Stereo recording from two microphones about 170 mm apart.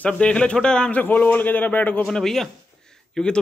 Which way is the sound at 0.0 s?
5° left (ahead or behind).